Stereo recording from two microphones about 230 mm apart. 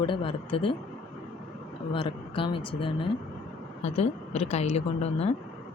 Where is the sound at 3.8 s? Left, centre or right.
Left.